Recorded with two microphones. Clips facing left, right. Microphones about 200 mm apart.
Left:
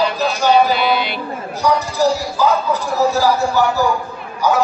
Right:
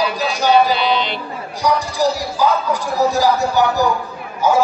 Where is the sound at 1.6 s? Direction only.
15° right (ahead or behind).